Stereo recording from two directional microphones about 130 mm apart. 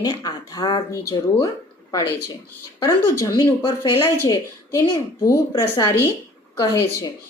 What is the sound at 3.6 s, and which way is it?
Speech, 40° left (ahead or behind).